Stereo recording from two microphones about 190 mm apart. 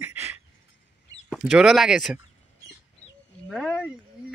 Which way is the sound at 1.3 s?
Centre (ahead or behind).